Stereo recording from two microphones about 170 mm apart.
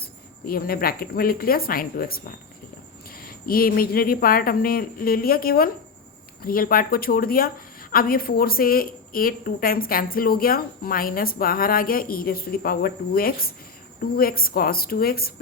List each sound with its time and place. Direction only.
0.0 s a woman's voice: 60° left (ahead or behind)